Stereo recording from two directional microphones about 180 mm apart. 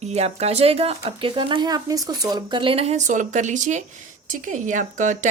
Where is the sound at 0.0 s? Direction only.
40° right (ahead or behind).